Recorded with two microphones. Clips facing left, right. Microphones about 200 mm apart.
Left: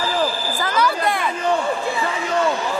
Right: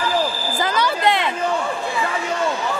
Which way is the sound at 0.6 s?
20° right (ahead or behind).